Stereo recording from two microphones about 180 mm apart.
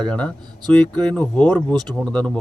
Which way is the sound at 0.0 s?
5° left (ahead or behind).